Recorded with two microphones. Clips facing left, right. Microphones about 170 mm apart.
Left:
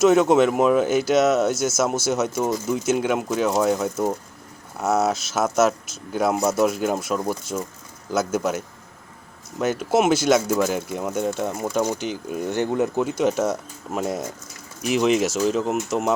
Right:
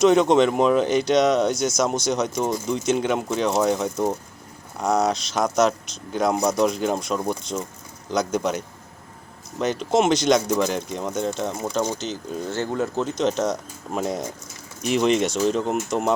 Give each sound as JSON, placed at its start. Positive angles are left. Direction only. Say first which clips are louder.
{"t": 0.0, "sound": "speech", "louder": "even", "side_deg": 5}